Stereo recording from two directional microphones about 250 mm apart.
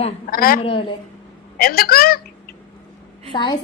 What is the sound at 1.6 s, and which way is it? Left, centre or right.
Speech, left.